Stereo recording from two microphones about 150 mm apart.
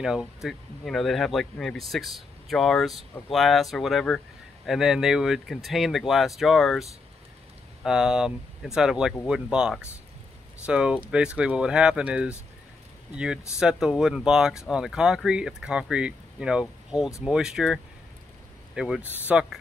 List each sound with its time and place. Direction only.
0.0 s speech: 5° right (ahead or behind)
18.8 s speech: 5° right (ahead or behind)